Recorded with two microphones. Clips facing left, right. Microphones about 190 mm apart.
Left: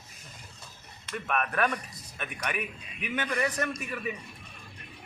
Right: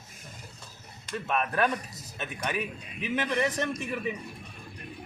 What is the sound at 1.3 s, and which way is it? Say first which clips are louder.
A man's voice: right 1 dB; 25° right (ahead or behind).